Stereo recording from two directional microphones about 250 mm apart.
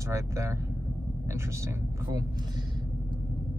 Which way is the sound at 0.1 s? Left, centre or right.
Centre.